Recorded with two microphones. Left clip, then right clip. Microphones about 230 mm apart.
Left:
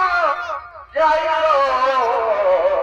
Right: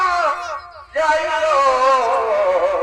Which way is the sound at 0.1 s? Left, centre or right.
Right.